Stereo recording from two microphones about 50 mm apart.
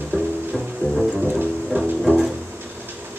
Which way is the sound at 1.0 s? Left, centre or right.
Right.